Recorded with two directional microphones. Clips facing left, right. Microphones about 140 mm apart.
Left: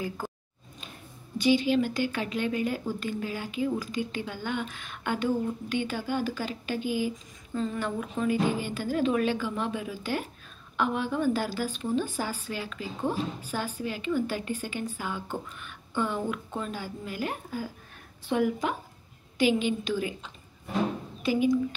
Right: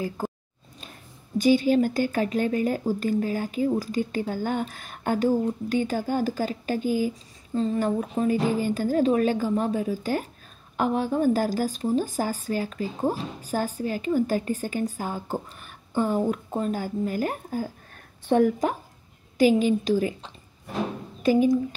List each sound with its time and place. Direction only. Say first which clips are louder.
1.4 s speech: right 4 dB; 40° right (ahead or behind)